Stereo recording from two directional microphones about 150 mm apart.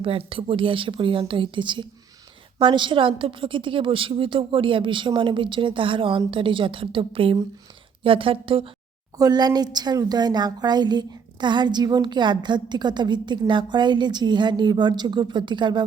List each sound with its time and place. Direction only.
0.0 s a woman's voice: 35° right (ahead or behind)
9.1 s speech: 25° right (ahead or behind)